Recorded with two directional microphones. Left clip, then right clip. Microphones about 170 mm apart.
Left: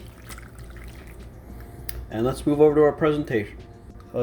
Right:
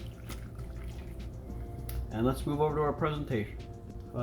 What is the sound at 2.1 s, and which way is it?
Speech, 45° left (ahead or behind).